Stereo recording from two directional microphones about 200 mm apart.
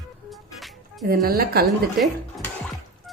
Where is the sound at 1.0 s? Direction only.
45° right (ahead or behind).